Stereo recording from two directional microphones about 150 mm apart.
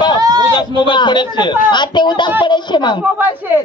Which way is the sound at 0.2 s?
25° right (ahead or behind).